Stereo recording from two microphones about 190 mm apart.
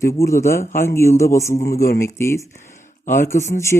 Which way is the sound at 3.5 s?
15° left (ahead or behind).